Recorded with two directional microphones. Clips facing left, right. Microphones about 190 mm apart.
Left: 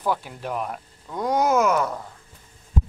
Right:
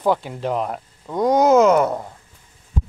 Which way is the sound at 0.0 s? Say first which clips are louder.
Right 6 dB; 55° right (ahead or behind).